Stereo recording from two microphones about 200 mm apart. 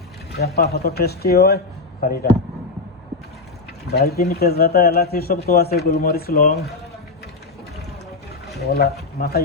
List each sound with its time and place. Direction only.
0.3 s a man's voice: 55° left (ahead or behind)
3.9 s speech: 50° left (ahead or behind)
8.6 s speech: 50° left (ahead or behind)